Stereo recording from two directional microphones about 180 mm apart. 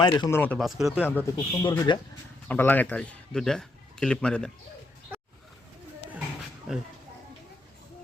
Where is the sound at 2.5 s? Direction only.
10° left (ahead or behind).